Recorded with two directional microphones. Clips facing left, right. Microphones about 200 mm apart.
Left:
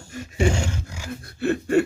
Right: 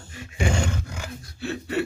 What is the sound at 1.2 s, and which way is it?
Gasp, 55° left (ahead or behind).